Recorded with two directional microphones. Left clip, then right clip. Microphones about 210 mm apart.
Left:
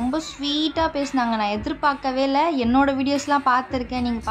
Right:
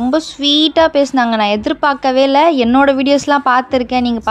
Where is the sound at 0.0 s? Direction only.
35° right (ahead or behind).